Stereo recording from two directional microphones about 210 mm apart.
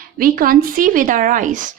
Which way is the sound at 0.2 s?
45° right (ahead or behind).